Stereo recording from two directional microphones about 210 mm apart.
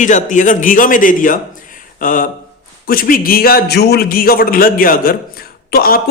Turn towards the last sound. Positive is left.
turn(degrees=45)  # may be behind; listen again after turning